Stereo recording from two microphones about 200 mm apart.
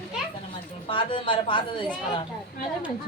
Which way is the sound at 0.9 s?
25° left (ahead or behind).